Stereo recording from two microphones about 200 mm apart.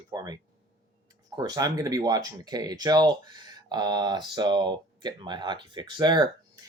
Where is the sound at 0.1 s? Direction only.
20° right (ahead or behind).